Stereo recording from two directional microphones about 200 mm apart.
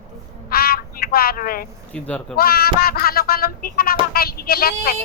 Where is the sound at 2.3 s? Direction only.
50° left (ahead or behind).